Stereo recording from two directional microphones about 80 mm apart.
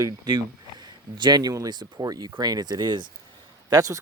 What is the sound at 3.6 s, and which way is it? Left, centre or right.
Speech, right.